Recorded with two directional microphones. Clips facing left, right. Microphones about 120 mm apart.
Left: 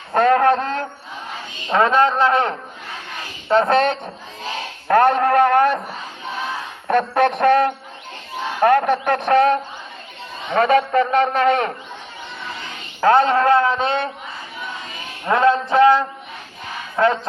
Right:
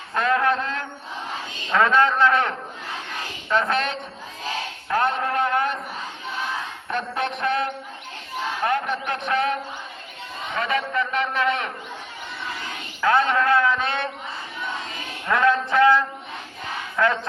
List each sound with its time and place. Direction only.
0.1 s a man's voice: 45° left (ahead or behind)
1.7 s a man's voice: 25° left (ahead or behind)
3.5 s a man's voice: 35° left (ahead or behind)
4.9 s a man's voice: 50° left (ahead or behind)
6.8 s a man's voice: 55° left (ahead or behind)
10.7 s a man's voice: 45° left (ahead or behind)
13.0 s a man's voice: 35° left (ahead or behind)
15.3 s a sound: 25° left (ahead or behind)
17.0 s a man's voice: 35° left (ahead or behind)